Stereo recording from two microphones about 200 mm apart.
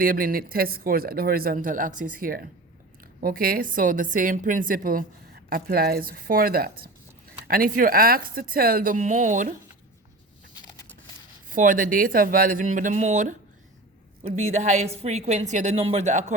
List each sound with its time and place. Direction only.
0.0 s a woman's voice: 45° right (ahead or behind)
11.5 s a woman's voice: 40° right (ahead or behind)